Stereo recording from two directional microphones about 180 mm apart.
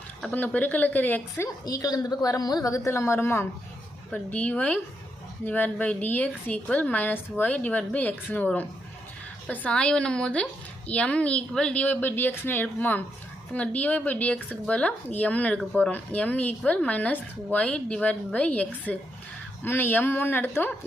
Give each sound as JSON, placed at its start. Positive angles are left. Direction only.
{"t": 0.2, "sound": "a woman's voice", "side_deg": 5}